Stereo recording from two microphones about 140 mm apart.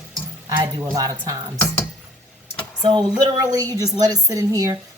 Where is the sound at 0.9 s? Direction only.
25° right (ahead or behind).